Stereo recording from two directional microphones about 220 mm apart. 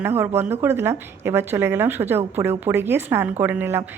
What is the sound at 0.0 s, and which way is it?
Speech, 10° right (ahead or behind).